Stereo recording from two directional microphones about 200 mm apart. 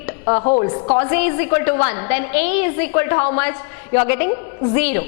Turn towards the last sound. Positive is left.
turn(degrees=10)  # may be behind; listen again after turning